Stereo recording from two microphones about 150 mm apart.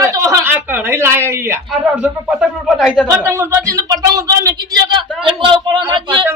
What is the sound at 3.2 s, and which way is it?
A man's voice, 20° right (ahead or behind).